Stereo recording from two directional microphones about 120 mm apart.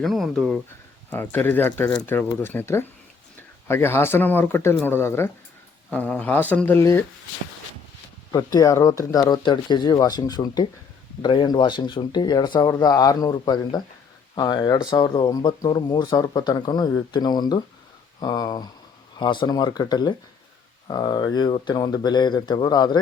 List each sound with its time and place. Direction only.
0.0 s speech: centre (ahead or behind)
1.1 s speech: 15° left (ahead or behind)
8.3 s speech: 30° left (ahead or behind)